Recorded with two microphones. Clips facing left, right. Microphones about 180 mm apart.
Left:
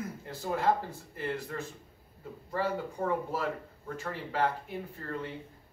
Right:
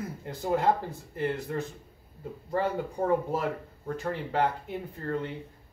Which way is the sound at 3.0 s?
30° right (ahead or behind).